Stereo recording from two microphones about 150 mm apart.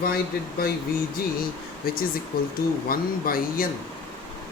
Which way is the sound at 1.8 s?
80° left.